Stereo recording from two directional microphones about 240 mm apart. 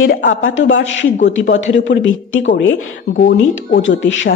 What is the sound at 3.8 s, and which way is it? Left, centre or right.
Speech, left.